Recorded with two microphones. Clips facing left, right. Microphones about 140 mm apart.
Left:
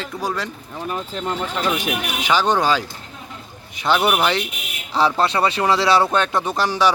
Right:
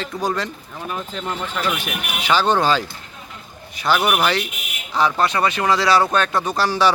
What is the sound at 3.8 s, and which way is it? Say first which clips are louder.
Speech: left 1 dB; 25° left (ahead or behind).